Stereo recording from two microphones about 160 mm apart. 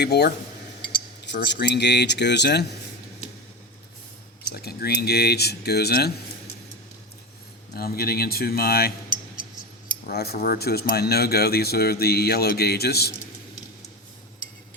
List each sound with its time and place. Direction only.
0.0 s speech: 90° left
4.5 s speech: 80° left
7.7 s speech: 70° left (ahead or behind)
10.1 s speech: 80° left